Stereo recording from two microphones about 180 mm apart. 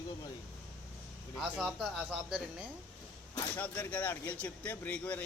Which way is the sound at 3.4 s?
10° left (ahead or behind).